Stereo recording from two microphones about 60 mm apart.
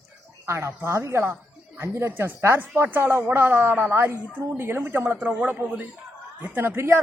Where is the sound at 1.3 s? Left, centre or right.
Right.